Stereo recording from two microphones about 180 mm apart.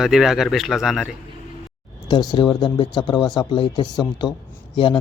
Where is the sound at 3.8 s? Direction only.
Centre (ahead or behind).